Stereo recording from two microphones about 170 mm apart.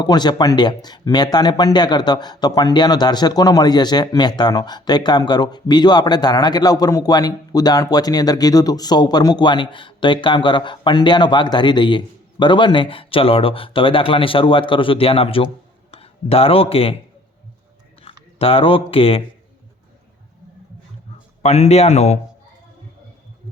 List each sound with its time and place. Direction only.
0.0 s speech: 25° left (ahead or behind)
18.0 s speech: 35° left (ahead or behind)
21.4 s speech: 40° left (ahead or behind)